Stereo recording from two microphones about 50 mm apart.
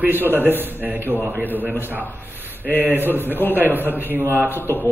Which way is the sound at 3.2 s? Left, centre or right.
Left.